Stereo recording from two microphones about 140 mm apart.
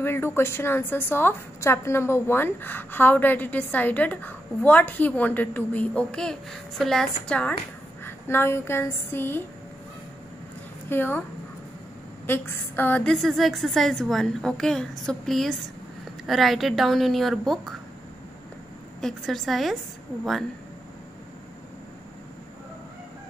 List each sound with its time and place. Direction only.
0.0 s a woman's voice: 15° left (ahead or behind)
10.9 s a woman's voice: 15° left (ahead or behind)
12.3 s a woman's voice: 15° left (ahead or behind)
18.9 s a woman's voice: centre (ahead or behind)